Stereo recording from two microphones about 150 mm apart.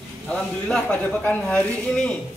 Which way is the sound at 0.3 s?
Centre (ahead or behind).